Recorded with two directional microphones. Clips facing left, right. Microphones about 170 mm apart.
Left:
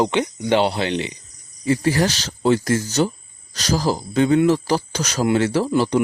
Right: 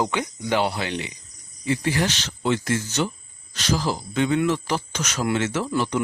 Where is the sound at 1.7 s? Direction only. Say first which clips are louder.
Left 5 dB; 40° left (ahead or behind).